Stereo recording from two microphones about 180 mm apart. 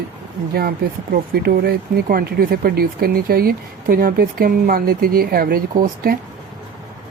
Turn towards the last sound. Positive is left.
turn(degrees=-50)  # may be behind; listen again after turning